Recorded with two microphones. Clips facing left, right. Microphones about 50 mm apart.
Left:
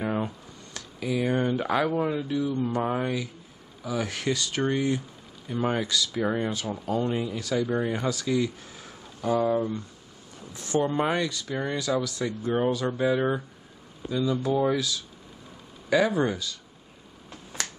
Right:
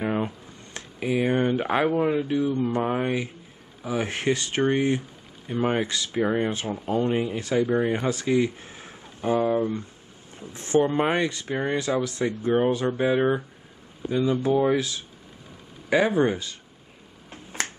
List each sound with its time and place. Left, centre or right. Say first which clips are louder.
0.0 s a sound: right 2 dB; right
0.7 s speech: right 3 dB; right
17.3 s finger snapping: right 4 dB; right